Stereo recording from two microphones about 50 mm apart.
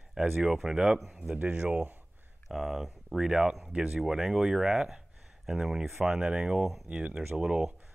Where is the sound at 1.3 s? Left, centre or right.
Right.